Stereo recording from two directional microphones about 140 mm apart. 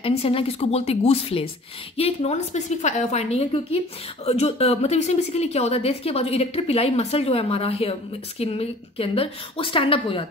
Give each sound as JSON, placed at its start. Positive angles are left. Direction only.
{"t": 0.0, "sound": "a woman's voice", "side_deg": 45}